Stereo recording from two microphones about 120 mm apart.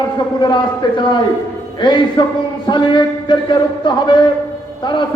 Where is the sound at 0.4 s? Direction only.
40° left (ahead or behind).